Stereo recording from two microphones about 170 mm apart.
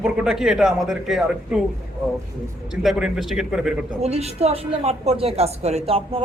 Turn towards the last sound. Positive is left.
turn(degrees=-35)  # may be behind; listen again after turning